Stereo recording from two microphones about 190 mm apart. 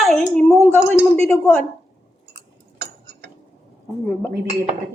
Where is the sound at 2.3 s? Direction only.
60° right (ahead or behind).